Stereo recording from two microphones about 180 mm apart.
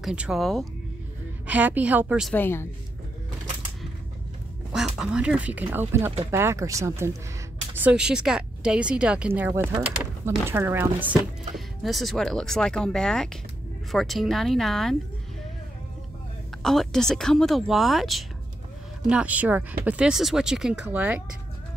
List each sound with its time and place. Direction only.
0.0 s speech: 5° right (ahead or behind)
2.3 s speech: 10° left (ahead or behind)
4.7 s speech: 5° right (ahead or behind)
16.6 s speech: centre (ahead or behind)